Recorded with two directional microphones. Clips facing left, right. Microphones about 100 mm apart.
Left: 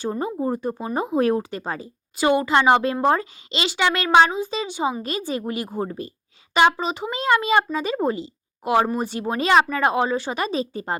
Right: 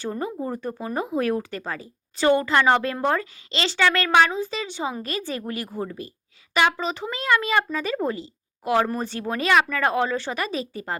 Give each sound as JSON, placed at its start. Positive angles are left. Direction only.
{"t": 0.0, "sound": "a child's voice", "side_deg": 20}